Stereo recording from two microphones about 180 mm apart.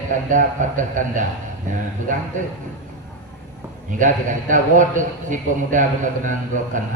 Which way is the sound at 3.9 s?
45° right (ahead or behind).